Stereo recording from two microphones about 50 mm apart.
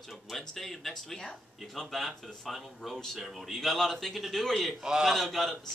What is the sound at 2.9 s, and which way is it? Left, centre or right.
Speech, centre.